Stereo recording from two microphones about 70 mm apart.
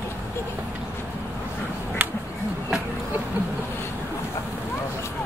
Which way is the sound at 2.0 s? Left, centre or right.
Right.